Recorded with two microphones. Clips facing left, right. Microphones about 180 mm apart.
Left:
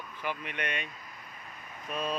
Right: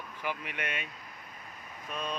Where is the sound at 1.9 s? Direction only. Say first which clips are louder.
Left 3 dB; 5° left (ahead or behind).